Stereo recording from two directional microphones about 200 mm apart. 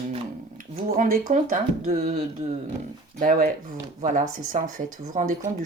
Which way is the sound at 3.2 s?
45° right (ahead or behind).